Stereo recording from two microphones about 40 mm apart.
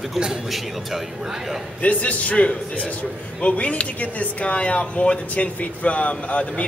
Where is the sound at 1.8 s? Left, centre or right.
Left.